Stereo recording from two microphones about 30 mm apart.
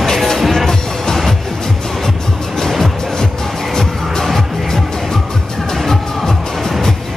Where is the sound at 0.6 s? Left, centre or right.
Centre.